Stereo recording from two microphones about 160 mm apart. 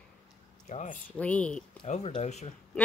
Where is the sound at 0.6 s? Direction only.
50° left (ahead or behind).